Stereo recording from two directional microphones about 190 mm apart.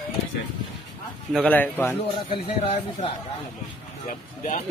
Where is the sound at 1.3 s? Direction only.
5° left (ahead or behind).